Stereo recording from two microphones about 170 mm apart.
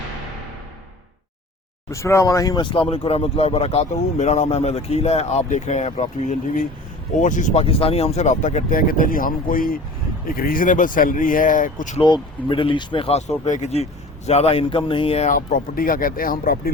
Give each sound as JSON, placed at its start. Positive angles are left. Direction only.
{"t": 1.9, "sound": "speech", "side_deg": 15}
{"t": 11.9, "sound": "speech", "side_deg": 30}
{"t": 15.3, "sound": "speech", "side_deg": 55}